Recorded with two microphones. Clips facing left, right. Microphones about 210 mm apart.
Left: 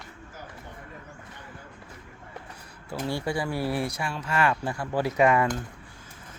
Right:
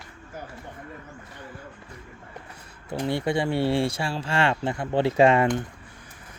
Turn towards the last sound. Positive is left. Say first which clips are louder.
# right 3 dB
turn(degrees=-25)  # may be behind; listen again after turning